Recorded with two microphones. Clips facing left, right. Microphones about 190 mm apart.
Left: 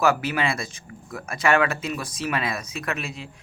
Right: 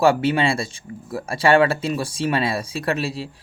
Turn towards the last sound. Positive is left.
turn(degrees=-35)  # may be behind; listen again after turning